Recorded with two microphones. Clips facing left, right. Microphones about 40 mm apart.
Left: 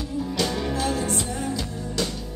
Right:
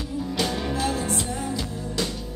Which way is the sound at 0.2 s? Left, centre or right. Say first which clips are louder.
Left 1 dB; centre.